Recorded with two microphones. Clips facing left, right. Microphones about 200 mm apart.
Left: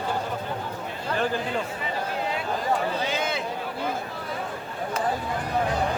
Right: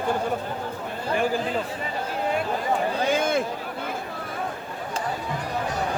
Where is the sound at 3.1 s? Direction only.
50° right (ahead or behind).